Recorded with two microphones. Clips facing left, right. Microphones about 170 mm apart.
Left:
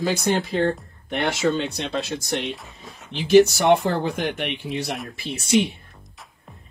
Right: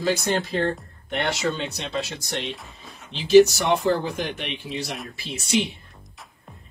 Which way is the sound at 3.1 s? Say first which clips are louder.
Right 1 dB; 55° left (ahead or behind).